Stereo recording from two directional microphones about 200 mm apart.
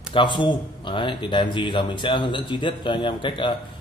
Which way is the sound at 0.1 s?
25° left (ahead or behind).